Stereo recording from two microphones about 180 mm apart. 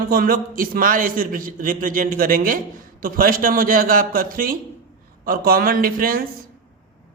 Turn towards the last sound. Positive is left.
turn(degrees=-55)  # may be behind; listen again after turning